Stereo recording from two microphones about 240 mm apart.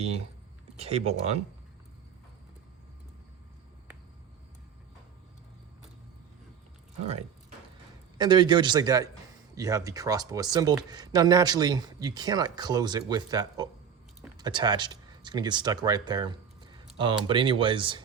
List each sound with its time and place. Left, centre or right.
0.8 s speech: right
8.2 s speech: centre